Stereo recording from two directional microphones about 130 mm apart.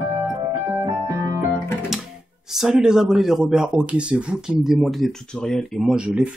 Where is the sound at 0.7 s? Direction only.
20° right (ahead or behind).